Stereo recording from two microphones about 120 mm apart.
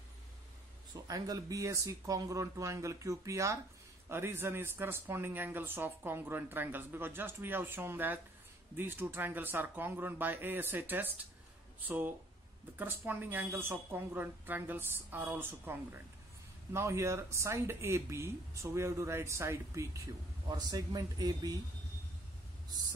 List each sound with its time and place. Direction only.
1.0 s speech: 30° right (ahead or behind)